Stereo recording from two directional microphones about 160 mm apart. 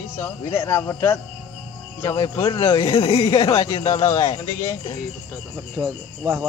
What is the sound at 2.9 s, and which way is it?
Speech, 40° left (ahead or behind).